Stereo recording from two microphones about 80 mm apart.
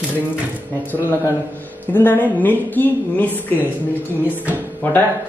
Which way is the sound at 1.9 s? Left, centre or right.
Left.